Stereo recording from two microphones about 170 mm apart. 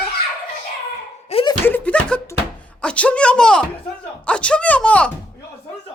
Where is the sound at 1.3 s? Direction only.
35° left (ahead or behind).